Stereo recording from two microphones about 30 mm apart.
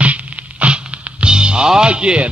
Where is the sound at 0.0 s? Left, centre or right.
Right.